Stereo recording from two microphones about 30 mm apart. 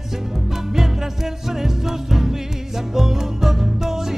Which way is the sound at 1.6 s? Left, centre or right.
Centre.